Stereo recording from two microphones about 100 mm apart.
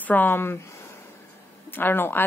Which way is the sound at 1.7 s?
20° left (ahead or behind).